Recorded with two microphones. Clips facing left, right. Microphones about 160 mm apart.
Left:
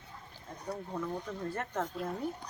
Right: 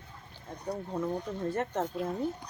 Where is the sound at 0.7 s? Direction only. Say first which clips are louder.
Right 4 dB; 20° right (ahead or behind).